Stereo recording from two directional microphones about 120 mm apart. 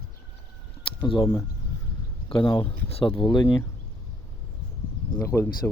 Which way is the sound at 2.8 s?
55° left (ahead or behind).